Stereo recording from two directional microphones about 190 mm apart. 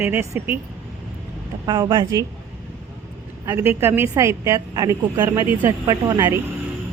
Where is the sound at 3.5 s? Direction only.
10° right (ahead or behind).